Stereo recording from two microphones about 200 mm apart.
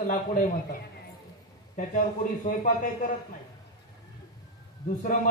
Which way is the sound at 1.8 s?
45° left (ahead or behind).